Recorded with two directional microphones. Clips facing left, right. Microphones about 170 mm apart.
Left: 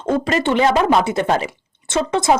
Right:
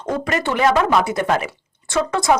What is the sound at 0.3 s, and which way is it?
Speech, 25° left (ahead or behind).